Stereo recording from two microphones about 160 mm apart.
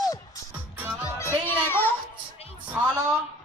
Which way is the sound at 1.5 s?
15° left (ahead or behind).